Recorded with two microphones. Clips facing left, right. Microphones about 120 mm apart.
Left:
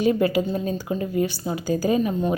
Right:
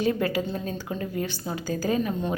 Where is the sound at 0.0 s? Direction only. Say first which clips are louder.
Left 5 dB; 15° left (ahead or behind).